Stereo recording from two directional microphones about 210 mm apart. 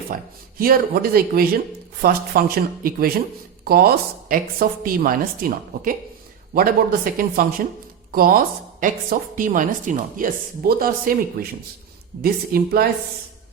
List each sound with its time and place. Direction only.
0.1 s a woman's voice: 45° right (ahead or behind)
12.5 s speech: 45° right (ahead or behind)